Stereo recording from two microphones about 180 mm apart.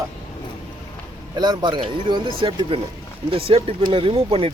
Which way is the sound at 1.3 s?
25° right (ahead or behind).